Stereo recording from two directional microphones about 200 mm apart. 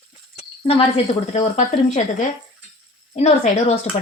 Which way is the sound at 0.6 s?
30° left (ahead or behind).